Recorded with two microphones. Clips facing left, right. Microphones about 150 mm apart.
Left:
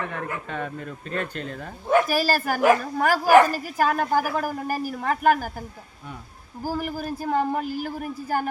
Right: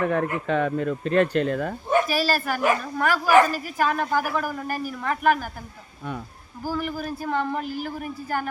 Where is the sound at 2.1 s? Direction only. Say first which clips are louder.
Left 1 dB; 45° left (ahead or behind).